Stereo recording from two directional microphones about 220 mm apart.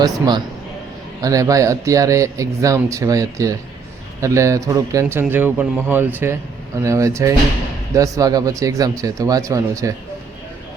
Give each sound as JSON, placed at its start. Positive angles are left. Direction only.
{"t": 0.0, "sound": "a man's voice", "side_deg": -20}